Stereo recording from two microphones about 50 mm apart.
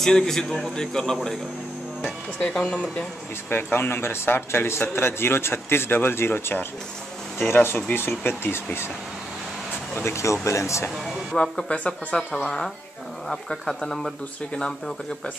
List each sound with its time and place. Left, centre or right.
0.0 s speech: centre
2.4 s speech: left
3.4 s speech: left
10.0 s speech: left
11.3 s speech: centre
11.7 s speech: left
12.4 s speech: centre